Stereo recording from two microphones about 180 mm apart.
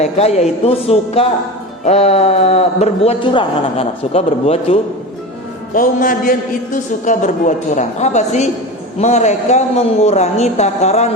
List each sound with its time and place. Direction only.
0.0 s a man's voice: 35° left (ahead or behind)
5.7 s a man's voice: 50° left (ahead or behind)